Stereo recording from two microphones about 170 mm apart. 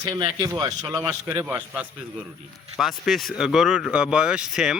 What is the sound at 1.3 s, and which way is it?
A man's voice, 10° right (ahead or behind).